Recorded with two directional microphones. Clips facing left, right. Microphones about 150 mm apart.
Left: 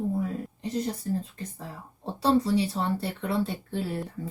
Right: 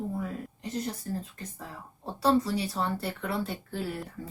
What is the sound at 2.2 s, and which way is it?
A woman's voice, 30° left (ahead or behind).